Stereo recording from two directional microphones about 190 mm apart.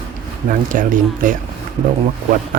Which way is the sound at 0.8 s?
45° right (ahead or behind).